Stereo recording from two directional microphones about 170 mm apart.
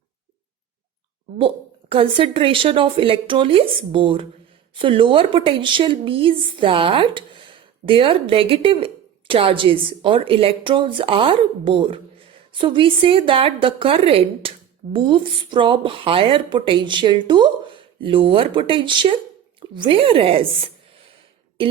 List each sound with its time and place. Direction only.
1.4 s speech: 30° right (ahead or behind)
21.6 s speech: 30° right (ahead or behind)